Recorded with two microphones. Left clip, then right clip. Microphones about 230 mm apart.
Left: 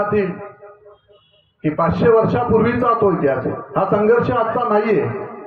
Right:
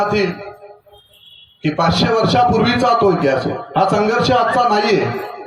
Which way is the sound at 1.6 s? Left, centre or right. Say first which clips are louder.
Right 1 dB; right.